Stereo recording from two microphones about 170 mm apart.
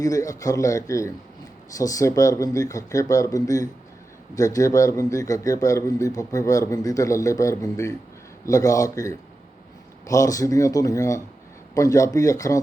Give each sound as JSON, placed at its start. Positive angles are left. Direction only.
{"t": 0.0, "sound": "speech", "side_deg": 20}